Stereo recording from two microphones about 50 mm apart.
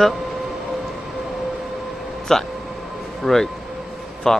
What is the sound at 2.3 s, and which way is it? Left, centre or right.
A man's voice, centre.